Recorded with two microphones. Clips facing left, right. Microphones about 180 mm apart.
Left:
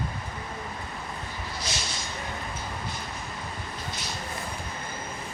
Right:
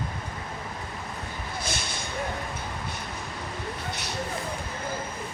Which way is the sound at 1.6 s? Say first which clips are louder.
Right 2 dB; 55° right (ahead or behind).